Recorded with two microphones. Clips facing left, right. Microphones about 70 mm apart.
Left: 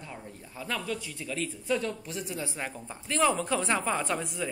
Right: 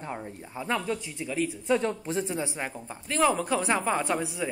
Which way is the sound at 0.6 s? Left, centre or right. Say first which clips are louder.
Right 4 dB; right.